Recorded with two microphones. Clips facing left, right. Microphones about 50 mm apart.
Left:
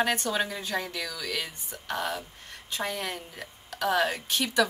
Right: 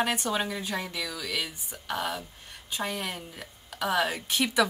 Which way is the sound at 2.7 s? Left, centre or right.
Centre.